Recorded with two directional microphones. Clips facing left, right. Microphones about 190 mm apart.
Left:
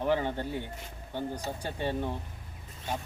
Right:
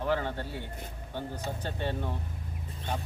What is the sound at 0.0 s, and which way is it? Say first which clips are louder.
Speech: left 2 dB; 15° left (ahead or behind).